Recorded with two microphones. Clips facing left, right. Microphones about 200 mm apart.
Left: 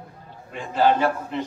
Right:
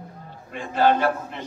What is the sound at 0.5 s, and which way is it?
Speech, 55° right (ahead or behind).